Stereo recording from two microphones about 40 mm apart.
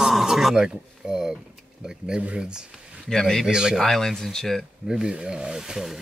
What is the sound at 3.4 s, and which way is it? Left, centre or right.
Speech, centre.